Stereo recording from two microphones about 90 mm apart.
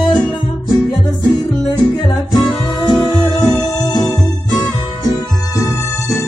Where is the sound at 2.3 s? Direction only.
50° left (ahead or behind).